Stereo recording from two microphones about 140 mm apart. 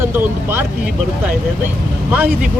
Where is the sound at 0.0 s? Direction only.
15° right (ahead or behind).